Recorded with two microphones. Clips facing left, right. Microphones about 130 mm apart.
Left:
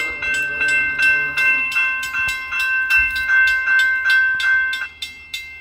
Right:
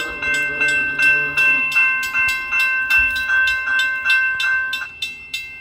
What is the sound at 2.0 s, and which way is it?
Train, 25° right (ahead or behind).